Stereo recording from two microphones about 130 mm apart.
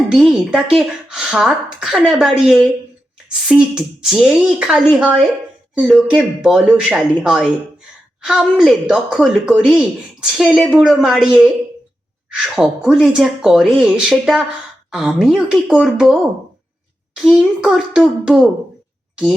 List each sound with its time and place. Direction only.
0.1 s a woman's voice: 5° right (ahead or behind)
17.2 s a woman's voice: 5° right (ahead or behind)